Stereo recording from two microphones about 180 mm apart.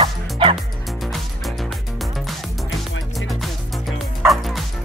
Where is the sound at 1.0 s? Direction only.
Centre (ahead or behind).